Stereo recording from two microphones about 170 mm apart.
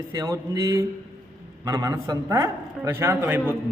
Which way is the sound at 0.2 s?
20° right (ahead or behind).